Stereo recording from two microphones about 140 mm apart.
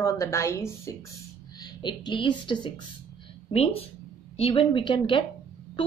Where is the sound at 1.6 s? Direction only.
35° left (ahead or behind).